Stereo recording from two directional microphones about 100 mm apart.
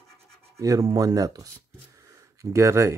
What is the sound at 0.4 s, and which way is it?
Scratch, 35° right (ahead or behind).